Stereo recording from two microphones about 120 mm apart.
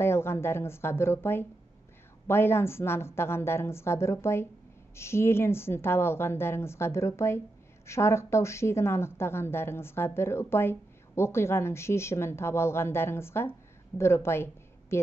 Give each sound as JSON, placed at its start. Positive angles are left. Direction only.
{"t": 0.0, "sound": "a woman's voice", "side_deg": 20}